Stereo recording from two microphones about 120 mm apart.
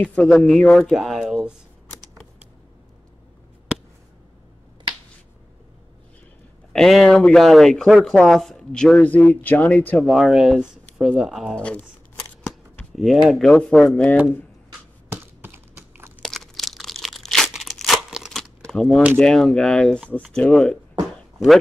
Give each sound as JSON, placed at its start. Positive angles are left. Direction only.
{"t": 0.0, "sound": "speech", "side_deg": 10}
{"t": 6.7, "sound": "speech", "side_deg": 5}
{"t": 10.0, "sound": "speech", "side_deg": 0}
{"t": 12.9, "sound": "speech", "side_deg": 0}
{"t": 15.0, "sound": "a sound", "side_deg": -20}
{"t": 16.2, "sound": "crumpling", "side_deg": 5}
{"t": 19.1, "sound": "speech", "side_deg": 5}